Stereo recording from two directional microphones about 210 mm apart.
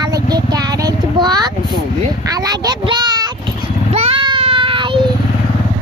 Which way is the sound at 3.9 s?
25° right (ahead or behind).